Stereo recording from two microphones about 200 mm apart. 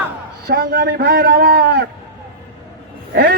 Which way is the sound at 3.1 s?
55° right (ahead or behind).